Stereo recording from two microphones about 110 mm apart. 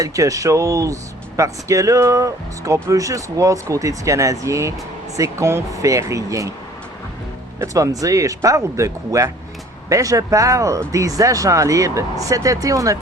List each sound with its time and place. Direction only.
0.0 s speech: 30° right (ahead or behind)
7.6 s speech: 30° right (ahead or behind)